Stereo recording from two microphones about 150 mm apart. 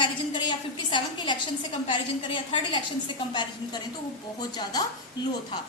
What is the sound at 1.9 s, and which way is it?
A woman's voice, 30° left (ahead or behind).